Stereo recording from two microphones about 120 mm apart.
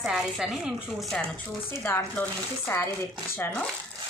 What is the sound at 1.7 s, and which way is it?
Speech, 15° left (ahead or behind).